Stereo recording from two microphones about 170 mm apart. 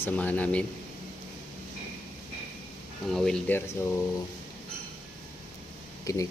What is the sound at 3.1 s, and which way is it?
Speech, 5° left (ahead or behind).